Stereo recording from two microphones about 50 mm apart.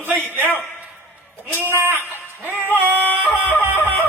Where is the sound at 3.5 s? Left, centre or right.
Left.